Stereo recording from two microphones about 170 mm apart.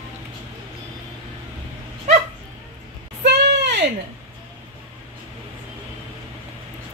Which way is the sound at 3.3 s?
80° right.